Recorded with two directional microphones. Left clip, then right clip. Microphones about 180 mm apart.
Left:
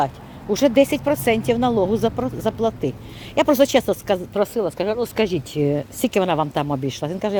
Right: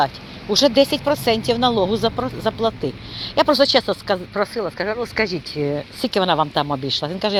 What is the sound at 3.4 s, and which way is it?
Speech, 25° left (ahead or behind).